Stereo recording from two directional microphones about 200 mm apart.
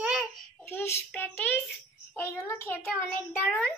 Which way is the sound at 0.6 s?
10° left (ahead or behind).